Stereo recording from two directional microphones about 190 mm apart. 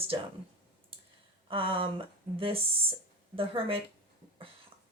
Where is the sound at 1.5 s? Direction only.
30° right (ahead or behind).